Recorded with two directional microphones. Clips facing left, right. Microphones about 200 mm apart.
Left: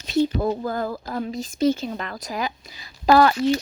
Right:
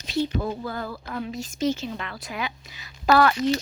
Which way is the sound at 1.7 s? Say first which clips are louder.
Left 3 dB; 45° left (ahead or behind).